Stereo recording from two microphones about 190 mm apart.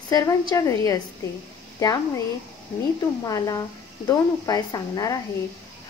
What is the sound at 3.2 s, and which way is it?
A woman's voice, 20° left (ahead or behind).